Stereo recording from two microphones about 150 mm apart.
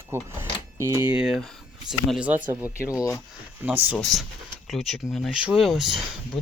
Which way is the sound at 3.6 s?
10° right (ahead or behind).